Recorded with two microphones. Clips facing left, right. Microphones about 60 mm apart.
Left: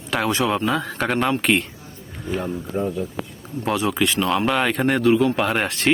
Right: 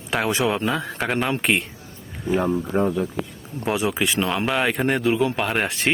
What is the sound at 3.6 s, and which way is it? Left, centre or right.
Speech, centre.